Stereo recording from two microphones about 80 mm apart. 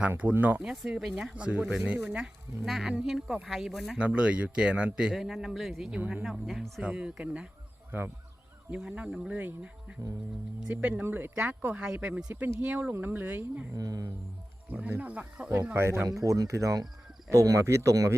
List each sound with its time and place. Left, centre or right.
0.0 s a man's voice: centre
3.9 s a man's voice: centre
8.7 s a man's voice: centre
10.7 s speech: centre
13.7 s speech: right
14.7 s speech: centre
16.0 s speech: right